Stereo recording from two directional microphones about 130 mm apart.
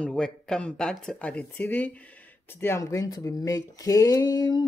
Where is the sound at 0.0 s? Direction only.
5° left (ahead or behind).